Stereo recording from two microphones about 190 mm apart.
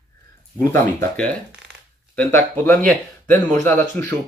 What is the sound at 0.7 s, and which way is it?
Speech, 5° left (ahead or behind).